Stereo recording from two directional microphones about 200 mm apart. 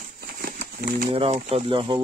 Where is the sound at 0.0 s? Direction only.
45° right (ahead or behind).